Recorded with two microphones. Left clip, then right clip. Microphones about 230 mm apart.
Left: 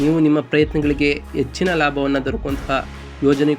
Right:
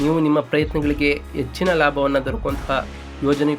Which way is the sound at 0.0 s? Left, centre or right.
Centre.